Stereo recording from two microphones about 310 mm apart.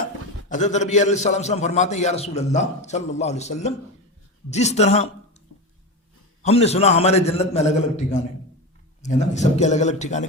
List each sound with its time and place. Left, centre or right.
0.4 s a man's voice: left
6.4 s a man's voice: centre